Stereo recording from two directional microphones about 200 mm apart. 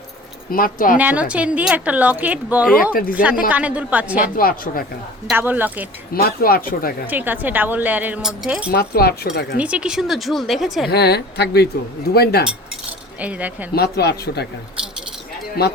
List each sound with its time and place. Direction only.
0.5 s speech: 45° left (ahead or behind)
0.9 s a woman's voice: 5° right (ahead or behind)
2.9 s speech: 45° left (ahead or behind)
3.5 s a woman's voice: 5° right (ahead or behind)
4.4 s speech: 45° left (ahead or behind)
5.3 s a woman's voice: 10° right (ahead or behind)
6.1 s speech: 50° left (ahead or behind)
7.1 s a woman's voice: 10° right (ahead or behind)
8.7 s speech: 50° left (ahead or behind)
9.6 s a woman's voice: 5° right (ahead or behind)
10.8 s speech: 55° left (ahead or behind)
13.1 s a woman's voice: 5° right (ahead or behind)
13.7 s speech: 55° left (ahead or behind)
15.6 s speech: 50° left (ahead or behind)